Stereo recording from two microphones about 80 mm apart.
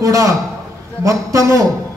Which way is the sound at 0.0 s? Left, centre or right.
Right.